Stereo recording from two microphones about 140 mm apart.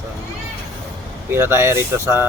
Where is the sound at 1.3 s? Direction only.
15° right (ahead or behind).